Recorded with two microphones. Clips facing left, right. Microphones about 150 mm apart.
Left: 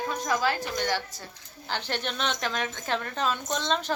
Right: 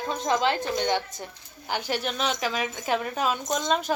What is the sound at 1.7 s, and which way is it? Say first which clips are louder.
Speech: right 3 dB; 10° right (ahead or behind).